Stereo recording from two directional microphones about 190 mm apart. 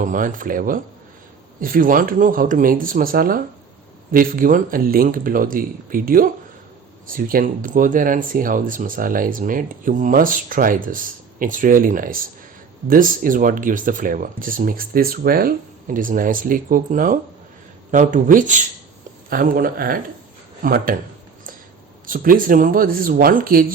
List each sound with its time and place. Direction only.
0.0 s speech: 45° right (ahead or behind)
22.0 s speech: 45° right (ahead or behind)